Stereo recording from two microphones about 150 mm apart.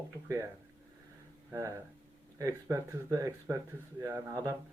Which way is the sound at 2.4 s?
20° right (ahead or behind).